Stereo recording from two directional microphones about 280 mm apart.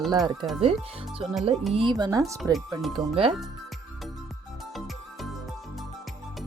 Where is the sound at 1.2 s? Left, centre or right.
Centre.